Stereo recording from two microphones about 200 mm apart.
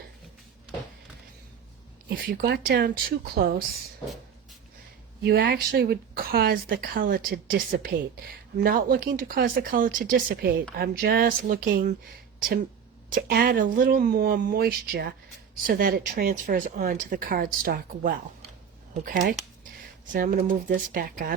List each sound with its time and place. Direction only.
2.0 s speech: 50° right (ahead or behind)
5.2 s speech: 60° right (ahead or behind)
13.1 s speech: 45° right (ahead or behind)